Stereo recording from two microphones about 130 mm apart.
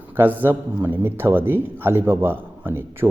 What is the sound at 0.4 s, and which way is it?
A man's voice, 15° right (ahead or behind).